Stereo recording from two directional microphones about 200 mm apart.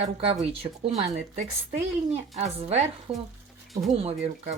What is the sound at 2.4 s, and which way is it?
Speech, 30° right (ahead or behind).